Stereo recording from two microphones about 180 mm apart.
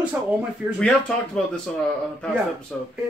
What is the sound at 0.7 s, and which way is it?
Speech, 5° left (ahead or behind).